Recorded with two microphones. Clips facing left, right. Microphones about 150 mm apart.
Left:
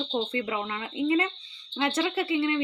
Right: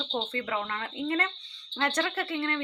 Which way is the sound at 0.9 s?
5° left (ahead or behind).